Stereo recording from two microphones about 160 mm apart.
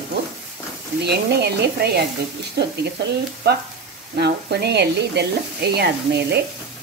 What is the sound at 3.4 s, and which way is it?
Speech, 90° right.